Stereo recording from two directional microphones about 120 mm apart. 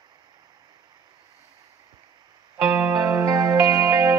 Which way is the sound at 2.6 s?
20° right (ahead or behind).